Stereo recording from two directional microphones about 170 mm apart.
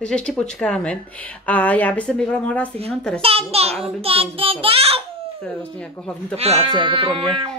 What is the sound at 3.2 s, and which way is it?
Speech, 35° right (ahead or behind).